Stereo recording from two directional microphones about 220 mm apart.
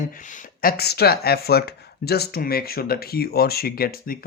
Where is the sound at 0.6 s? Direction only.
45° left (ahead or behind).